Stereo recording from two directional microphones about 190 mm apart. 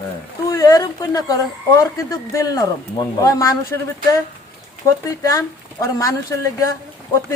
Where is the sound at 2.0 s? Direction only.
15° left (ahead or behind).